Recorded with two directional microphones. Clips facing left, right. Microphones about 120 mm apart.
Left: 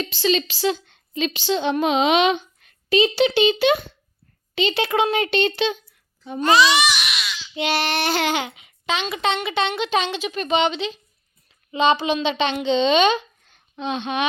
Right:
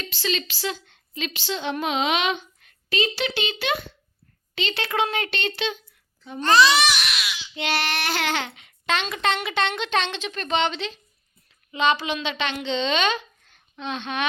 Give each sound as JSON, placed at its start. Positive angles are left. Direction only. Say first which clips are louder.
{"t": 0.0, "sound": "a woman's voice", "louder": "left 7 dB", "side_deg": 25}
{"t": 6.4, "sound": "speech", "louder": "left 1 dB", "side_deg": 0}
{"t": 7.5, "sound": "speech", "louder": "left 4 dB", "side_deg": 15}
{"t": 11.7, "sound": "a woman's voice", "louder": "left 4 dB", "side_deg": 20}